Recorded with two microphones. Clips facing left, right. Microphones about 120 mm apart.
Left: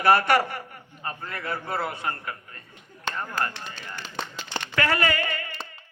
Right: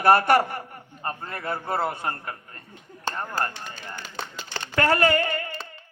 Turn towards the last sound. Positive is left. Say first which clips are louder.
# right 4 dB
turn(degrees=-40)  # may be behind; listen again after turning